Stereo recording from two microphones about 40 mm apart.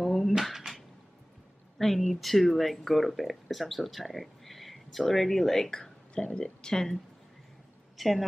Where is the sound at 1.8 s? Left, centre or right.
Centre.